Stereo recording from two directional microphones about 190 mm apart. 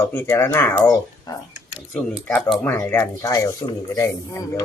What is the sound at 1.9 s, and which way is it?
Speech, 10° left (ahead or behind).